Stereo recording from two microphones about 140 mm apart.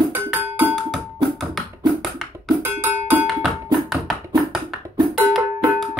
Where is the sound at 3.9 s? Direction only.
Centre (ahead or behind).